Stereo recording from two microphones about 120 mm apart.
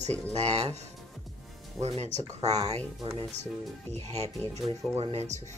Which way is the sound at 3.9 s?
65° right (ahead or behind).